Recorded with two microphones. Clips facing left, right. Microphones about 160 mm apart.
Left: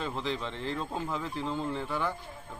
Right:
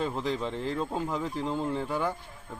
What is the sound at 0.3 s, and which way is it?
Speech, 5° right (ahead or behind).